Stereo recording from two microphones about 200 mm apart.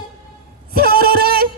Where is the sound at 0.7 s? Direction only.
50° right (ahead or behind).